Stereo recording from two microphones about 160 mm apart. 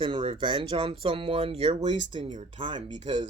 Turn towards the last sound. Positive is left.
turn(degrees=-30)  # may be behind; listen again after turning